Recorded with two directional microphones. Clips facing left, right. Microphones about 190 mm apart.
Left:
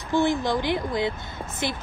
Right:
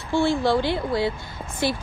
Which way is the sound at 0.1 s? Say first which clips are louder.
Right 2 dB; 20° left (ahead or behind).